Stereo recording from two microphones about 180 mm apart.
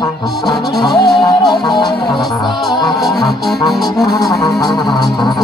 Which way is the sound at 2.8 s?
Centre (ahead or behind).